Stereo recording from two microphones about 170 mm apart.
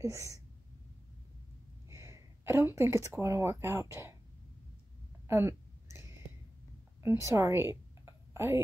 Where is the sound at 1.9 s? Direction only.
15° right (ahead or behind).